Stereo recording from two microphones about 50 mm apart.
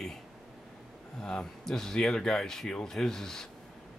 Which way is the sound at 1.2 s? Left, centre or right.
Centre.